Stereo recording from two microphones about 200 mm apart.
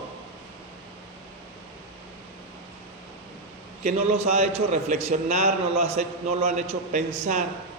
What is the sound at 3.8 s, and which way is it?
A man's voice, 30° right (ahead or behind).